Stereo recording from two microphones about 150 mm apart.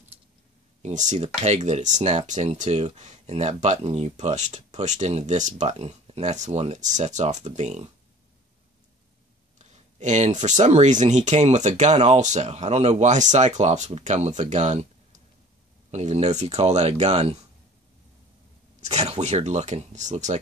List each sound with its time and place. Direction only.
0.8 s speech: 50° right (ahead or behind)
9.6 s speech: 50° right (ahead or behind)
15.9 s speech: 45° right (ahead or behind)
18.8 s speech: 50° right (ahead or behind)